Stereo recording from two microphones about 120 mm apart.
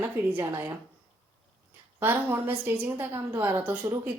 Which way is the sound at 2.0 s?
20° right (ahead or behind).